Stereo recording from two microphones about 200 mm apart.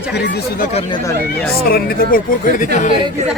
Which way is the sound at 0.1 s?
55° left (ahead or behind).